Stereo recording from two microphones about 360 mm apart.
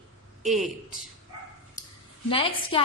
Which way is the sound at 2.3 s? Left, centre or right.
Centre.